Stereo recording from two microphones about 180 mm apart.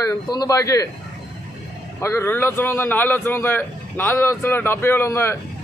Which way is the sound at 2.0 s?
15° left (ahead or behind).